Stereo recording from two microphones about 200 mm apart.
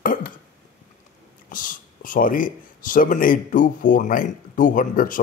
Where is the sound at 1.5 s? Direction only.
40° left (ahead or behind).